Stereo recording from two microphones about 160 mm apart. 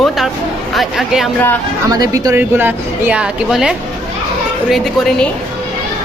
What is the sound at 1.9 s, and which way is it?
A woman's voice, 20° right (ahead or behind).